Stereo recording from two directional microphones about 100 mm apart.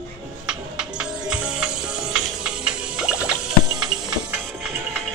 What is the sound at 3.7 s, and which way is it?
Music, 45° right (ahead or behind).